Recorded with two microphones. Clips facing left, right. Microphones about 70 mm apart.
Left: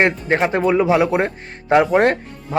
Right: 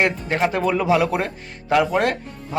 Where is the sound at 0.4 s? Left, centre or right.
Left.